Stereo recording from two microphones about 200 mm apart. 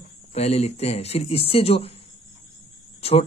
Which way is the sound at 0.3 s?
30° left (ahead or behind).